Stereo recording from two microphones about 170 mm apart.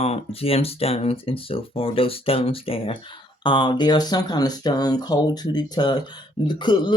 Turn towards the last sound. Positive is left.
turn(degrees=25)  # may be behind; listen again after turning